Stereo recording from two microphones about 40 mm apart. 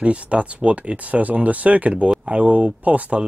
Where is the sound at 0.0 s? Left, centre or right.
Right.